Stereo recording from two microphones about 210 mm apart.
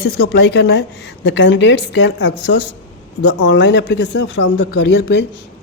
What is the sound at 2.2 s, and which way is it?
Speech, 55° left (ahead or behind).